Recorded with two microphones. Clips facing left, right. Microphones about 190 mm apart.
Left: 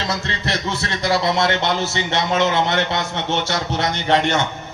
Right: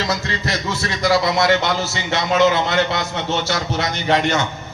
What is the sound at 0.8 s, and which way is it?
A man's voice, 25° left (ahead or behind).